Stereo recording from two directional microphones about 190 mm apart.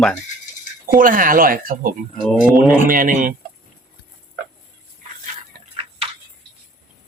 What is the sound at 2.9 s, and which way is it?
Speech, 45° right (ahead or behind).